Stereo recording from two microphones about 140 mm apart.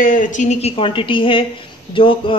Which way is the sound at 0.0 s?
70° left (ahead or behind).